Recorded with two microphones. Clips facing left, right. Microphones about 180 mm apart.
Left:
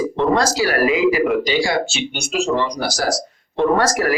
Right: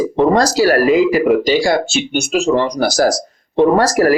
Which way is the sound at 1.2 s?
40° right (ahead or behind).